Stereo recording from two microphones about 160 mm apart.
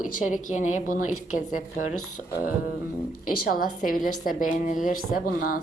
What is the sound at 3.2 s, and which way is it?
A woman's voice, 60° left (ahead or behind).